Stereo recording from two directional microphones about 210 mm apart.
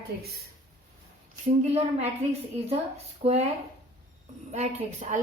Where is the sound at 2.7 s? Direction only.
30° right (ahead or behind).